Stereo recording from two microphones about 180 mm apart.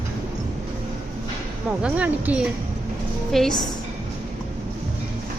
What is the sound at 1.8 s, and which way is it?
A woman's voice, 10° right (ahead or behind).